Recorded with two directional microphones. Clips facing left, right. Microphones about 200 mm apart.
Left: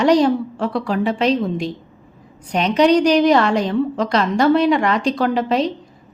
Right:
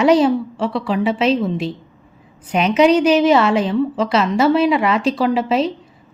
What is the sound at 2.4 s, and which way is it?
A woman's voice, 5° right (ahead or behind).